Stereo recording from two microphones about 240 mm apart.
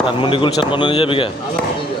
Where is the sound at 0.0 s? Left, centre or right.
Left.